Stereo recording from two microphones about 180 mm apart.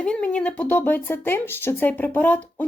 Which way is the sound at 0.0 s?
5° left (ahead or behind).